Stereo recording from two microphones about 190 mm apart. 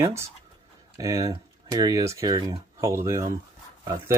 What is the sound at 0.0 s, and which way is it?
Speech, 15° right (ahead or behind).